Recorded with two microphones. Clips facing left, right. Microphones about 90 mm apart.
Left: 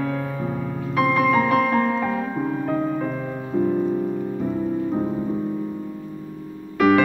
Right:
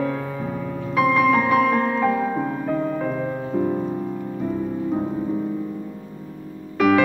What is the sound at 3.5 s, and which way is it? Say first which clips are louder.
Music: left 3 dB; 10° right (ahead or behind).